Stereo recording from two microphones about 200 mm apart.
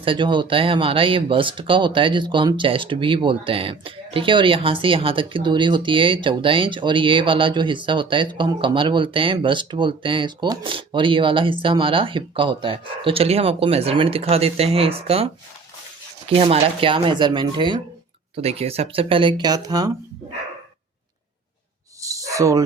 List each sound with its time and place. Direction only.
0.0 s speech: 25° right (ahead or behind)
16.3 s speech: 30° right (ahead or behind)
22.0 s a sound: 15° right (ahead or behind)